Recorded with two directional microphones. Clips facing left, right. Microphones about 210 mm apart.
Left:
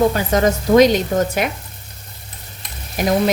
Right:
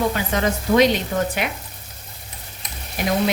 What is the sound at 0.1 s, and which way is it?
A woman's voice, 40° left (ahead or behind).